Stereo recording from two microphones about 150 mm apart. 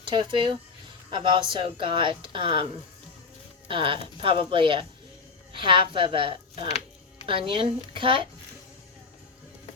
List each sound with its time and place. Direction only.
0.0 s speech: 30° right (ahead or behind)
3.7 s speech: 35° right (ahead or behind)